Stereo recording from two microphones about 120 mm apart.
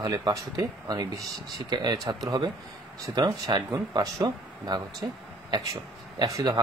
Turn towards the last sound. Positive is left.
turn(degrees=-30)  # may be behind; listen again after turning